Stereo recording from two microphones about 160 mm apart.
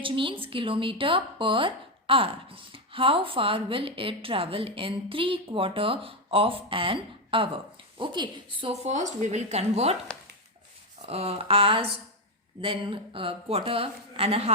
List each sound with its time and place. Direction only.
0.0 s a woman's voice: 30° right (ahead or behind)
11.1 s a woman's voice: 40° right (ahead or behind)